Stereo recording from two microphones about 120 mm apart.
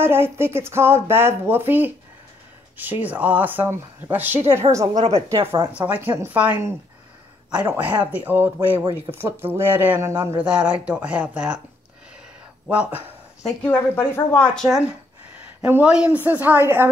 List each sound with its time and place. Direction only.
0.0 s speech: 20° right (ahead or behind)
4.9 s a woman's voice: 65° right (ahead or behind)
5.8 s speech: 15° right (ahead or behind)
8.0 s speech: 15° right (ahead or behind)
12.6 s speech: 10° right (ahead or behind)
13.6 s a woman's voice: 15° left (ahead or behind)
15.6 s speech: 10° right (ahead or behind)